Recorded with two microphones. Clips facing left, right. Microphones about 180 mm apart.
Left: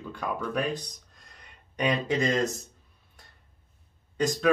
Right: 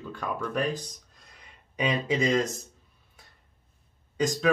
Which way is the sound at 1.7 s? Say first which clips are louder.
Left 1 dB; 5° right (ahead or behind).